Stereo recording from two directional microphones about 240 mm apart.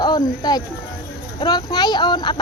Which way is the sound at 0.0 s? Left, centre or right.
Centre.